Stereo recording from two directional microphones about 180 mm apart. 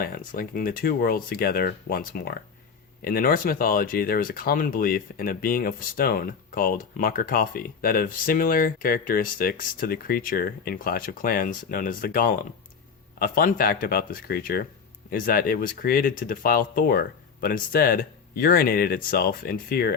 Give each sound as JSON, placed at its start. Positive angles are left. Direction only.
{"t": 0.0, "sound": "speech", "side_deg": 55}